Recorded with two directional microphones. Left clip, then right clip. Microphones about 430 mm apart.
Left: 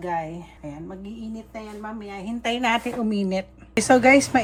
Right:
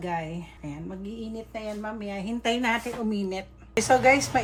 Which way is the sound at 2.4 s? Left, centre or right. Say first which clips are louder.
Left 3 dB; centre.